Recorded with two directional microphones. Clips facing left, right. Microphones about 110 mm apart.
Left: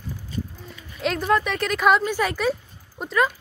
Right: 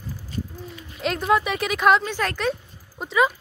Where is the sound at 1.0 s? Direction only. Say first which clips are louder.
Even; centre (ahead or behind).